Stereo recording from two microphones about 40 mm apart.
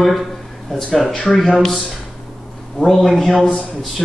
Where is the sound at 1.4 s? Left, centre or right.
Centre.